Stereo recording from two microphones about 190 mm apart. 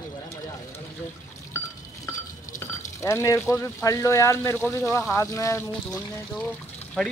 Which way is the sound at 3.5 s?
15° left (ahead or behind).